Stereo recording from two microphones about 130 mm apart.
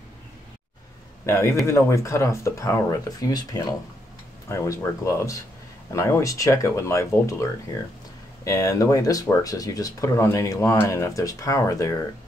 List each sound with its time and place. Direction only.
1.2 s speech: 20° left (ahead or behind)
8.5 s speech: 25° left (ahead or behind)